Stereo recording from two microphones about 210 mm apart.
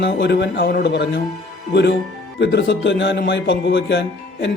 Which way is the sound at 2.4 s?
55° left (ahead or behind).